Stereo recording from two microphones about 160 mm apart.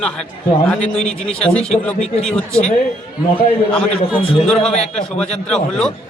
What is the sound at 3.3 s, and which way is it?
Speech, 35° left (ahead or behind).